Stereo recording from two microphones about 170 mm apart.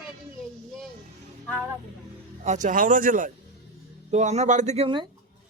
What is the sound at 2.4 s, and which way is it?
Speech, 45° right (ahead or behind).